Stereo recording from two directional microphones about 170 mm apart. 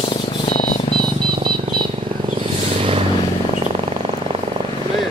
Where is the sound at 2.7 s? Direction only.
35° right (ahead or behind).